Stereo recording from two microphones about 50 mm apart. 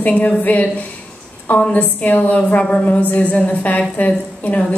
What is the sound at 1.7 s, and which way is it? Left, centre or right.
A woman's voice, left.